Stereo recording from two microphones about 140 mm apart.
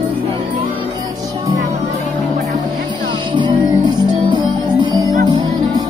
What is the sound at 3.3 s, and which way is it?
Music, 35° right (ahead or behind).